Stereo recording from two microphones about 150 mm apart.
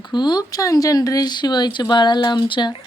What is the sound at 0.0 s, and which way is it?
Speech, 30° left (ahead or behind).